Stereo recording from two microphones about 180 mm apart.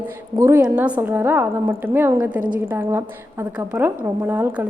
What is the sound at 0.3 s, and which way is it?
A woman's voice, 15° right (ahead or behind).